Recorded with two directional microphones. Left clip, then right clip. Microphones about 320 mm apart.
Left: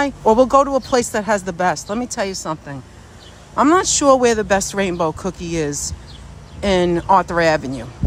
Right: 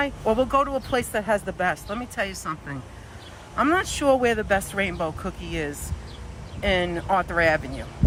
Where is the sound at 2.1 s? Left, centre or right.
Centre.